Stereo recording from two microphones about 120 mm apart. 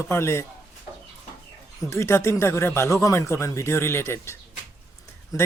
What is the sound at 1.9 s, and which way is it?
Speech, 20° left (ahead or behind).